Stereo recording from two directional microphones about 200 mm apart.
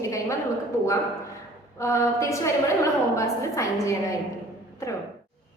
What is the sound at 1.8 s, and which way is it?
A woman's voice, 15° left (ahead or behind).